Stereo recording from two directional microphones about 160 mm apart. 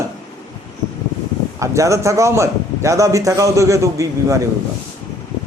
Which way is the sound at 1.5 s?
20° right (ahead or behind).